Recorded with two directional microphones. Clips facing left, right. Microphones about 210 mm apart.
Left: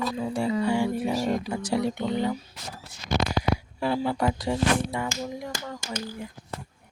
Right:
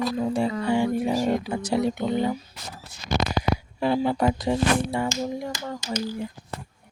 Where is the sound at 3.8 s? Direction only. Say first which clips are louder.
Right 4 dB; 20° right (ahead or behind).